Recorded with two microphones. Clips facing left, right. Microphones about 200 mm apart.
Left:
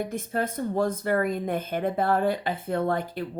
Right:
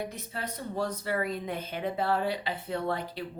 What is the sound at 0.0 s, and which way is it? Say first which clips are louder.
Speech: left 8 dB; 50° left (ahead or behind).